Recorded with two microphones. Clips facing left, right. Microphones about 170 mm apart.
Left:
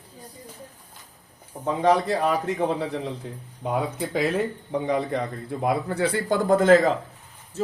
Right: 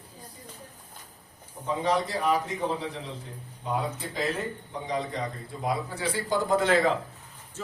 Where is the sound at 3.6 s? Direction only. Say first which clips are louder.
Left 4 dB; 60° left (ahead or behind).